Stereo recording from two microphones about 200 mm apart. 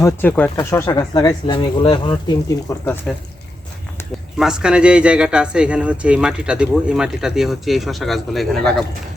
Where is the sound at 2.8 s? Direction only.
10° left (ahead or behind).